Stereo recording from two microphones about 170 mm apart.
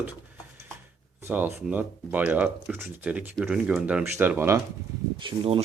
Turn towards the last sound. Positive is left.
turn(degrees=-35)  # may be behind; listen again after turning